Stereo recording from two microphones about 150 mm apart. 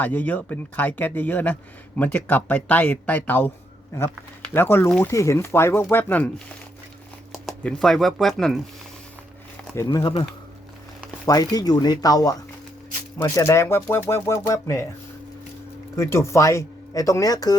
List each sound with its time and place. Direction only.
0.0 s speech: 10° left (ahead or behind)
4.5 s speech: 15° left (ahead or behind)
7.3 s speech: centre (ahead or behind)
9.7 s speech: 25° left (ahead or behind)
11.3 s speech: 25° left (ahead or behind)
16.0 s speech: 20° left (ahead or behind)